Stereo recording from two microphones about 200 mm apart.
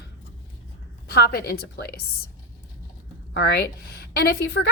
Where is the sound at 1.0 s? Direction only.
50° left (ahead or behind).